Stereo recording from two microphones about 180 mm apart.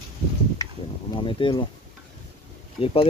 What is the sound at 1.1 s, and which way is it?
Speech, 30° left (ahead or behind).